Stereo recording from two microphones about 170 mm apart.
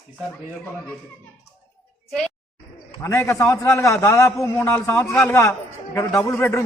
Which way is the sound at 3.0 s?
15° left (ahead or behind).